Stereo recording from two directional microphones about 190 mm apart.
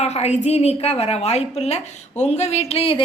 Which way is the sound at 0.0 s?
35° left (ahead or behind).